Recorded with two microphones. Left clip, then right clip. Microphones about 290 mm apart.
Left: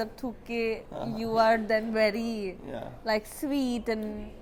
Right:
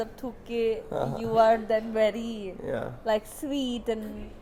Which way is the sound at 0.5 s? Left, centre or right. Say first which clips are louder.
Right 3 dB; centre.